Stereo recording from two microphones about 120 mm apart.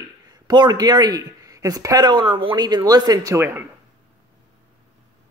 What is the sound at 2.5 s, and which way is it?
Speech, 35° right (ahead or behind).